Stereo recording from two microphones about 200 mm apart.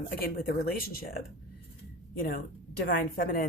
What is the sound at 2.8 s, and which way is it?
Speech, 50° left (ahead or behind).